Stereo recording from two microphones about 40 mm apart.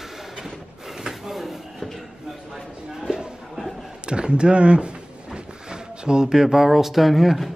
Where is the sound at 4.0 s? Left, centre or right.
Right; by 7.3 s centre.